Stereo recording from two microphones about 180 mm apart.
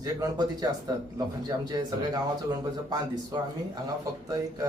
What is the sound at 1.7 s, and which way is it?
Speech, 25° right (ahead or behind).